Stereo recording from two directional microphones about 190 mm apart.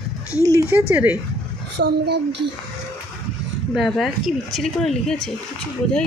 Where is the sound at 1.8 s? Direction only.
60° right (ahead or behind).